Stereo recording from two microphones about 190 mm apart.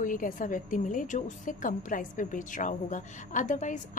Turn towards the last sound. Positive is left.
turn(degrees=40)  # may be behind; listen again after turning